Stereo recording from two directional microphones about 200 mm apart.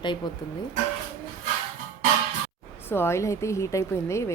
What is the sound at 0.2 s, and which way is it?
Speech, 20° left (ahead or behind).